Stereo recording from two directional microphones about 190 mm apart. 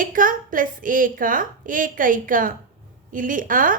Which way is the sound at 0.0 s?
45° right (ahead or behind).